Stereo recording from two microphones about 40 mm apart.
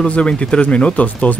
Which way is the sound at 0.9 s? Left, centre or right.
Left.